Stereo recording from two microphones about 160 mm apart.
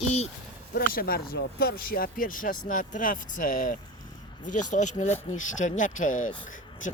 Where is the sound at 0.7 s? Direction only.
65° left (ahead or behind).